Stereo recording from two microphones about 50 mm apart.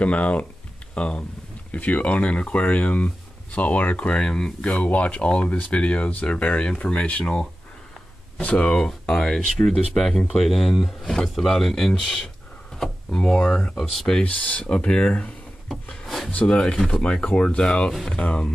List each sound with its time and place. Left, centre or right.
0.0 s speech: left
6.7 s speech: centre
8.4 s speech: left
8.6 s speech: centre
14.2 s speech: left
15.7 s wood: centre
16.3 s speech: left
16.5 s speech: centre
18.1 s speech: left